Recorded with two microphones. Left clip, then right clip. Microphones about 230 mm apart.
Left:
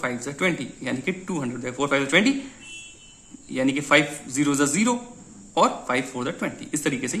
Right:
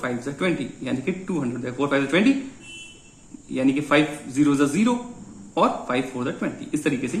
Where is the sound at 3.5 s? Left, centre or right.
Left.